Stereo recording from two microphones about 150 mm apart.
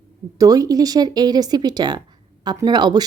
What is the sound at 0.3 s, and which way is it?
Speech, 25° right (ahead or behind).